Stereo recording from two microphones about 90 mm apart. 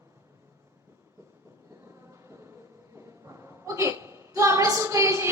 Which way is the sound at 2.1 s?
30° right (ahead or behind).